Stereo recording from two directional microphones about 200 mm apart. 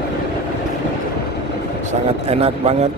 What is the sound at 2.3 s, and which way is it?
Speech, 30° right (ahead or behind).